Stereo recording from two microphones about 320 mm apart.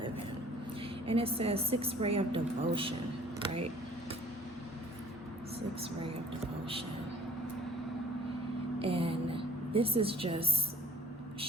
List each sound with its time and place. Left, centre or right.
1.0 s a woman's voice: centre
5.5 s a woman's voice: centre
8.8 s a sound: centre